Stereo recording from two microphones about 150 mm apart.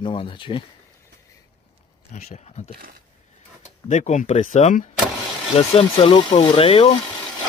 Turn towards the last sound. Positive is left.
turn(degrees=40)  # may be behind; listen again after turning